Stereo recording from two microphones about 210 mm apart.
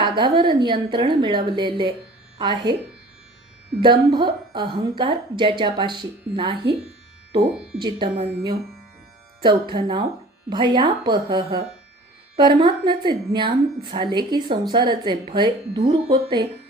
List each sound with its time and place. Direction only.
0.0 s speech: 25° right (ahead or behind)
3.8 s speech: 20° right (ahead or behind)
7.8 s speech: 20° right (ahead or behind)